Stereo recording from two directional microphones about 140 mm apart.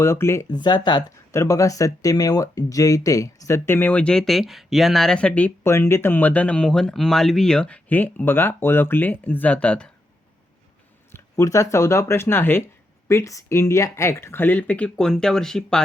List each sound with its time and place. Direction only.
0.0 s speech: 20° left (ahead or behind)
0.4 s speech: 30° left (ahead or behind)
1.3 s speech: 20° left (ahead or behind)
11.1 s speech: 25° left (ahead or behind); by 15.8 s 5° left (ahead or behind)